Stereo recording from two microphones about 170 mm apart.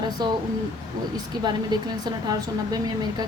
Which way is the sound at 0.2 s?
25° right (ahead or behind).